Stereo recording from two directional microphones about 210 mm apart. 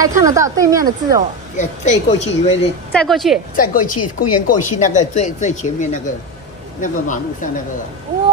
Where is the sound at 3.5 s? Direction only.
40° left (ahead or behind).